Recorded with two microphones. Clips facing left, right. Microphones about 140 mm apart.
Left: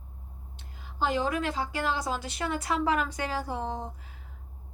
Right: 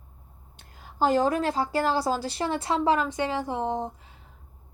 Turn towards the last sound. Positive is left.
turn(degrees=-20)  # may be behind; listen again after turning